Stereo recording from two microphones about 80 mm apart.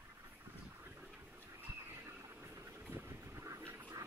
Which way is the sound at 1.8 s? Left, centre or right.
Right.